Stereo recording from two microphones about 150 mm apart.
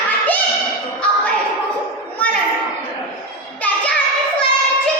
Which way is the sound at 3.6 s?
10° left (ahead or behind).